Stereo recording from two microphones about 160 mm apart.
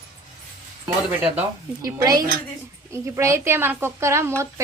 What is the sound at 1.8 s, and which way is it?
A woman's voice, 25° right (ahead or behind).